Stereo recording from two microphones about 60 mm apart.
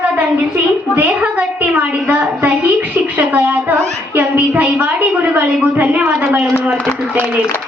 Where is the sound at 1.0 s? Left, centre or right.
Right.